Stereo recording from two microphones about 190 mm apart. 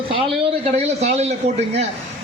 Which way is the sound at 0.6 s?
35° right (ahead or behind).